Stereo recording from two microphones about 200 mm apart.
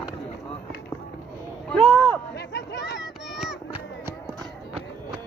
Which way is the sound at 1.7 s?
5° left (ahead or behind).